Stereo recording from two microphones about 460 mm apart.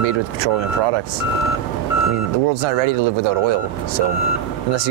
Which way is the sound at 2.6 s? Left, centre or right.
Right.